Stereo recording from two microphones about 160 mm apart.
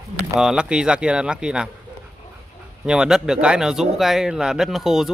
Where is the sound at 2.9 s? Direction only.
5° right (ahead or behind).